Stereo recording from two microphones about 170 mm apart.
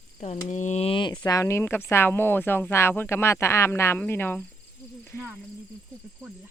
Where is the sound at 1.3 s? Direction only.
20° left (ahead or behind).